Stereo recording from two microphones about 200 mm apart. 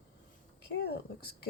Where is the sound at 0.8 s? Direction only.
55° left (ahead or behind).